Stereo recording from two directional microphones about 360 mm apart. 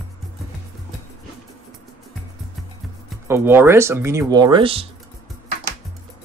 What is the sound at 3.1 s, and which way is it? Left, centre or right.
Speech, centre.